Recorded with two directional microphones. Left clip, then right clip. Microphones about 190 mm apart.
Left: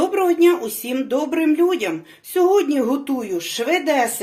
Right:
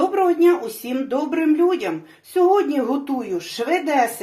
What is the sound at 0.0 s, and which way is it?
Speech, 35° left (ahead or behind).